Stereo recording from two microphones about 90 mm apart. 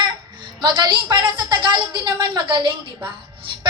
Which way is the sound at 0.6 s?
55° right (ahead or behind).